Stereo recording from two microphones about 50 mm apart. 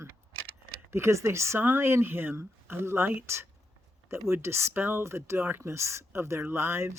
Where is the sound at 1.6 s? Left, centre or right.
Right.